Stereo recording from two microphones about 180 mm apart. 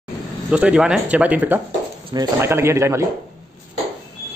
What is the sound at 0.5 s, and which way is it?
Speech, 5° right (ahead or behind).